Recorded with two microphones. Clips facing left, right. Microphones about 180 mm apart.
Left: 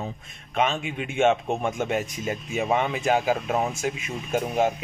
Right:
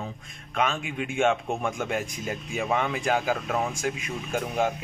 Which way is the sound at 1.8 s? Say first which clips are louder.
Left 3 dB; centre (ahead or behind).